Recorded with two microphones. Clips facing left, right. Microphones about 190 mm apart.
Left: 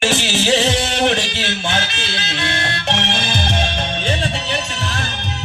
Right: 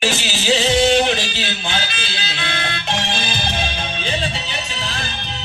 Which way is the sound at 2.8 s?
65° left (ahead or behind).